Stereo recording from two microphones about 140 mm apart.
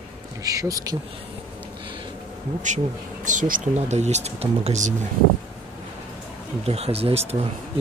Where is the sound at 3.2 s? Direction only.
70° right (ahead or behind); by 4.9 s 55° right (ahead or behind).